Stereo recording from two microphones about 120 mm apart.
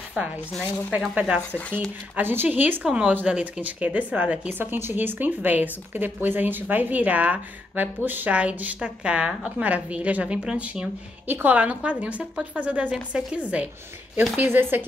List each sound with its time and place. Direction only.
0.2 s speech: 10° right (ahead or behind)
1.6 s speech: 10° left (ahead or behind)
2.1 s speech: 15° right (ahead or behind)